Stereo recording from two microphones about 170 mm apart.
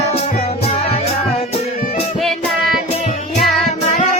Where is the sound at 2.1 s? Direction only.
Centre (ahead or behind).